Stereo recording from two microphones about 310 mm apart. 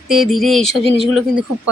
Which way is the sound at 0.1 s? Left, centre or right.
Centre.